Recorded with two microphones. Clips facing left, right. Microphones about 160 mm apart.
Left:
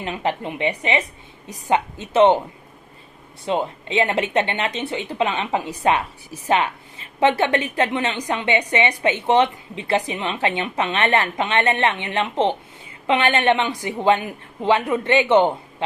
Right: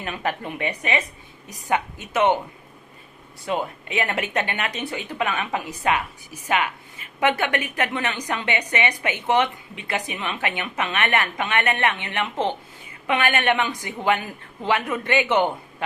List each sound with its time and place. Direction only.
0.0 s speech: 25° left (ahead or behind)
3.4 s speech: 25° left (ahead or behind)